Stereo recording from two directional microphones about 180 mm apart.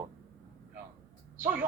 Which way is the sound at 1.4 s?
10° right (ahead or behind).